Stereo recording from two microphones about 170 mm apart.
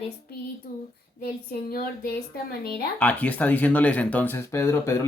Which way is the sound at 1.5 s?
65° left (ahead or behind).